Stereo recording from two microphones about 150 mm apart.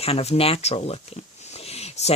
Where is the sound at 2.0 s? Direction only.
45° left (ahead or behind).